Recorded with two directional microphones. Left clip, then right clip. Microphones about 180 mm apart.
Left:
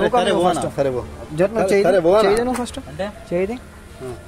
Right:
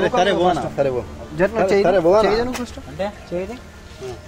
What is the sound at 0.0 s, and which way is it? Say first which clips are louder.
Speech: even; 35° left (ahead or behind).